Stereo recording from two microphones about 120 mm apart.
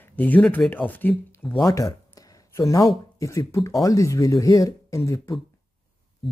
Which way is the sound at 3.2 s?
25° left (ahead or behind).